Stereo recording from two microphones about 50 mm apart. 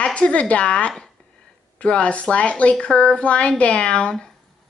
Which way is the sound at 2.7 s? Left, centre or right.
Centre.